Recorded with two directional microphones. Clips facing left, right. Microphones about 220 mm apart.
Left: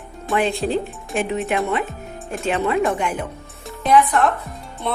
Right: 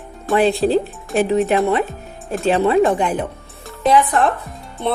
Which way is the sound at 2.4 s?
35° right (ahead or behind).